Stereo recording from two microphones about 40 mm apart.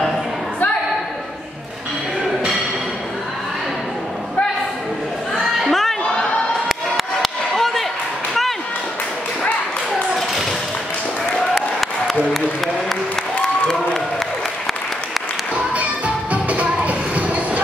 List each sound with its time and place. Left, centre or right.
5.3 s chatter: centre
6.7 s a sound: centre
15.5 s music: right